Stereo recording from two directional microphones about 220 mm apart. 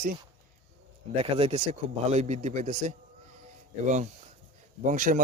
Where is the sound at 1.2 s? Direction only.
25° right (ahead or behind).